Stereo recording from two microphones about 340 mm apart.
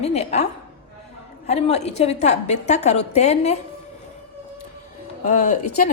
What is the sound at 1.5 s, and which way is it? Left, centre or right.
A woman's voice, centre.